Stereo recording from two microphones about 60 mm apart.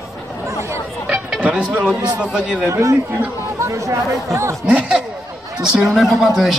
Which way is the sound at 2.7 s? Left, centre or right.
Right.